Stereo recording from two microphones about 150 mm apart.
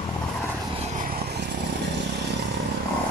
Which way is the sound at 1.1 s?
90° right.